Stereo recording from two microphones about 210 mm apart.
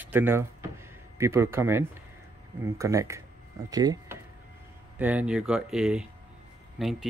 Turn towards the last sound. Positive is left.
turn(degrees=0)  # may be behind; listen again after turning